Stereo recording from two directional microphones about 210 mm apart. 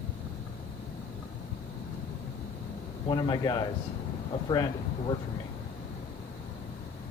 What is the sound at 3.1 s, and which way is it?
A man's voice, 20° left (ahead or behind).